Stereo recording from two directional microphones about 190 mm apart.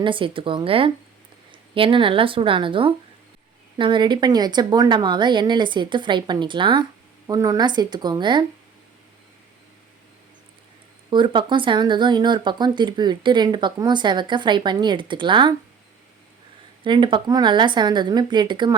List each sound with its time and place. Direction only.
0.0 s speech: 25° right (ahead or behind)
11.1 s speech: 25° right (ahead or behind)
16.8 s speech: 25° right (ahead or behind)